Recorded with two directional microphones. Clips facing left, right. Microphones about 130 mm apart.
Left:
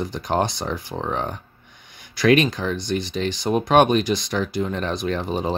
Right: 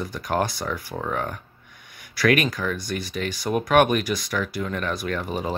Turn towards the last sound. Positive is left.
turn(degrees=25)  # may be behind; listen again after turning